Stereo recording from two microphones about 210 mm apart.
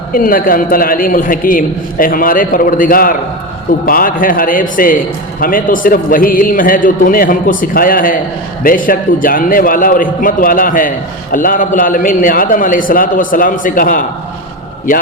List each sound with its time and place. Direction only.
0.1 s a man's voice: 40° left (ahead or behind)